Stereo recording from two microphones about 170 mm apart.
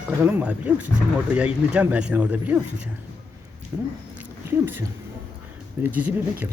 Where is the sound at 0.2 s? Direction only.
10° right (ahead or behind).